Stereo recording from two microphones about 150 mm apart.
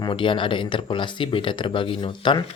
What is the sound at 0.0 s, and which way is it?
Speech, 35° left (ahead or behind).